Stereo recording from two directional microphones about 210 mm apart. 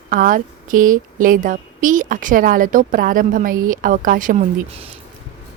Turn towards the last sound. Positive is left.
turn(degrees=-35)  # may be behind; listen again after turning